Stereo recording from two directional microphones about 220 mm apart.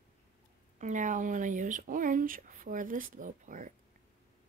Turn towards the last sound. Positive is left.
turn(degrees=-35)  # may be behind; listen again after turning